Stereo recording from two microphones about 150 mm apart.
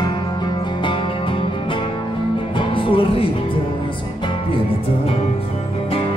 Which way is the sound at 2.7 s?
35° left (ahead or behind).